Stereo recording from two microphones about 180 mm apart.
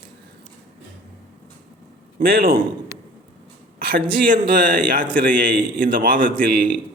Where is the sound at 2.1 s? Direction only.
55° right (ahead or behind).